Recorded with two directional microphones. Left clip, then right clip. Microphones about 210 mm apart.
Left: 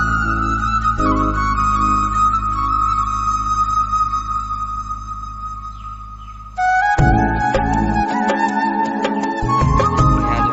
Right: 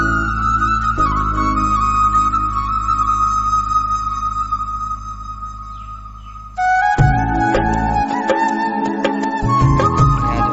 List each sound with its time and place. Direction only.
0.1 s flute: centre (ahead or behind)
2.6 s music: centre (ahead or behind)
6.6 s music: centre (ahead or behind)